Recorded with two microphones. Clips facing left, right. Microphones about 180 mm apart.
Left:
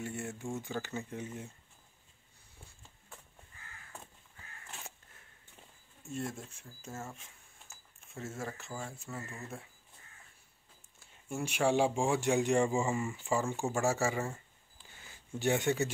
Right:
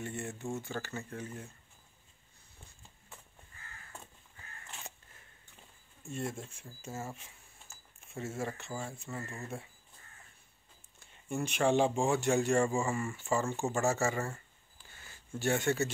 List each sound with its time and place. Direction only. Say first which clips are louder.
0.0 s speech: even; 5° left (ahead or behind)
6.0 s speech: right 1 dB; centre (ahead or behind)
11.0 s speech: right 2 dB; 5° left (ahead or behind)